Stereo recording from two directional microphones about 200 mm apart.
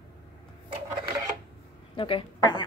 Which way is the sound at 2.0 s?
25° left (ahead or behind).